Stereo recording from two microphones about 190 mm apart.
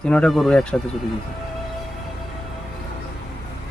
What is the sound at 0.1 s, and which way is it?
Speech, 5° left (ahead or behind).